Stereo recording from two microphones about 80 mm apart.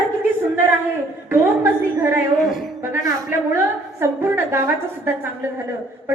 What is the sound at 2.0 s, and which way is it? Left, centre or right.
Speech, right.